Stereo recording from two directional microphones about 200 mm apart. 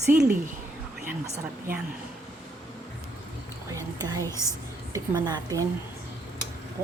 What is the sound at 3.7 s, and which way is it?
Whispering, 15° right (ahead or behind).